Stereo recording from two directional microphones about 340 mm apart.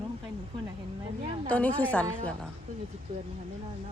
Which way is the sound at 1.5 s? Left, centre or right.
Centre.